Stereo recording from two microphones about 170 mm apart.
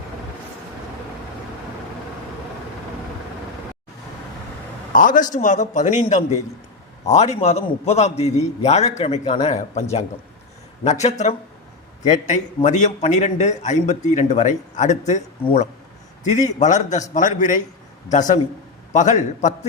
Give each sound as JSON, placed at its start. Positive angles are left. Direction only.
{"t": 4.9, "sound": "a man's voice", "side_deg": 50}
{"t": 10.8, "sound": "a man's voice", "side_deg": 45}